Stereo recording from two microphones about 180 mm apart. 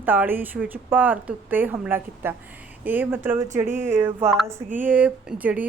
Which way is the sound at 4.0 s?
10° right (ahead or behind).